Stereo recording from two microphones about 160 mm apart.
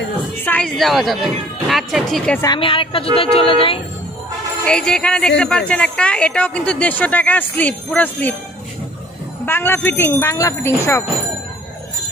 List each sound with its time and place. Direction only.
0.5 s speech: 5° left (ahead or behind)
2.4 s a woman's voice: 30° left (ahead or behind)
4.6 s speech: 5° left (ahead or behind)
9.5 s speech: 15° left (ahead or behind)